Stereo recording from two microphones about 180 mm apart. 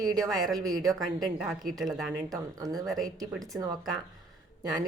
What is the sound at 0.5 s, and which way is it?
Speech, 20° right (ahead or behind).